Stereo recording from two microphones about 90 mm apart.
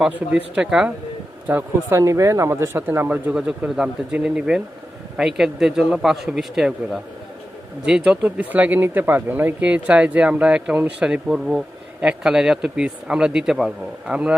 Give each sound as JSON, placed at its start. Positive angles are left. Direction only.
{"t": 0.1, "sound": "speech", "side_deg": -15}
{"t": 1.5, "sound": "speech", "side_deg": -20}
{"t": 2.0, "sound": "speech", "side_deg": -35}
{"t": 3.3, "sound": "speech", "side_deg": -10}